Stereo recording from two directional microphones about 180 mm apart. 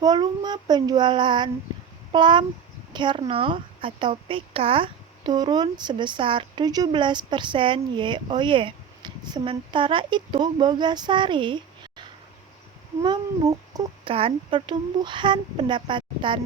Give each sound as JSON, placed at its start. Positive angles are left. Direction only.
{"t": 0.0, "sound": "a woman's voice", "side_deg": -25}